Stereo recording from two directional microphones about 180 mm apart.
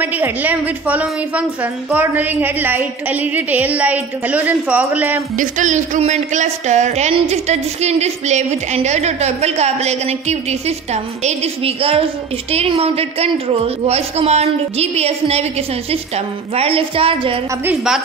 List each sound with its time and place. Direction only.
0.0 s a woman's voice: 10° right (ahead or behind)
5.4 s a woman's voice: 45° right (ahead or behind)
16.5 s a woman's voice: 30° right (ahead or behind)
17.6 s a woman's voice: centre (ahead or behind)